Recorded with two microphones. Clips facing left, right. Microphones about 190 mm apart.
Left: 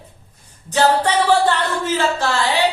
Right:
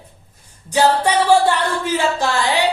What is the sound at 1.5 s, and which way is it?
Speech, 15° right (ahead or behind).